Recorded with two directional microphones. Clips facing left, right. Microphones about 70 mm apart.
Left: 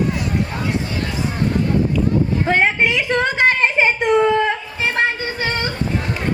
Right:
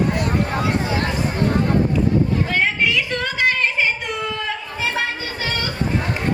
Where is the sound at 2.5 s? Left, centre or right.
Left.